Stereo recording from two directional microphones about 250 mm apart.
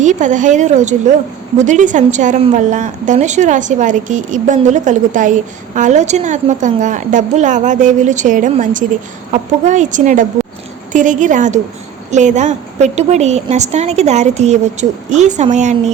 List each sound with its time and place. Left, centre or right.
0.0 s a woman's voice: right